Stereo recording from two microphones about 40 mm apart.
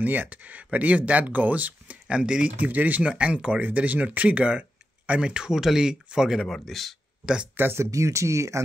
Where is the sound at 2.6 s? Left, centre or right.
Right.